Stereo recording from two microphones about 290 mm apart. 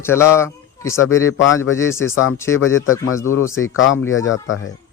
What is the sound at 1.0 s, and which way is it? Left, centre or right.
A man's voice, left.